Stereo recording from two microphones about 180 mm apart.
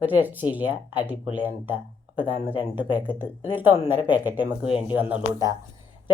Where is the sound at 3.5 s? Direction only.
10° right (ahead or behind).